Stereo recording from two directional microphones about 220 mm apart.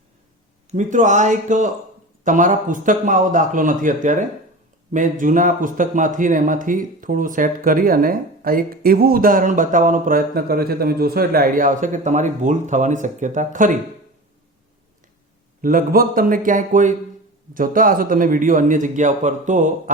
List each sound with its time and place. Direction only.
0.7 s speech: 35° right (ahead or behind)
15.6 s speech: 40° right (ahead or behind)